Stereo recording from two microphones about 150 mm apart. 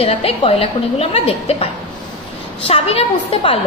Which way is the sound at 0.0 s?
40° left (ahead or behind).